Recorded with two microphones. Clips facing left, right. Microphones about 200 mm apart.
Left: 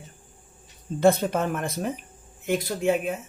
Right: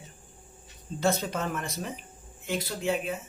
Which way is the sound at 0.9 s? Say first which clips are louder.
Left 7 dB; 55° left (ahead or behind).